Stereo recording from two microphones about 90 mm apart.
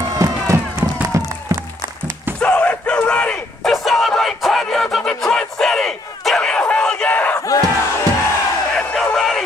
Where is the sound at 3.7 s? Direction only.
Centre (ahead or behind).